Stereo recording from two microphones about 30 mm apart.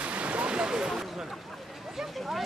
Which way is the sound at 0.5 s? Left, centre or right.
Right.